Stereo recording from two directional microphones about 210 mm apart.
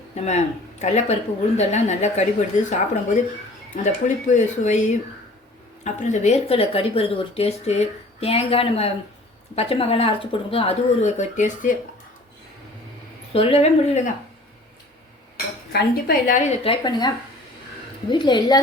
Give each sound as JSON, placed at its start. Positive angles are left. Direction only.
{"t": 0.2, "sound": "a woman's voice", "side_deg": 30}
{"t": 13.3, "sound": "speech", "side_deg": 30}
{"t": 15.7, "sound": "a woman's voice", "side_deg": 45}
{"t": 18.1, "sound": "speech", "side_deg": 20}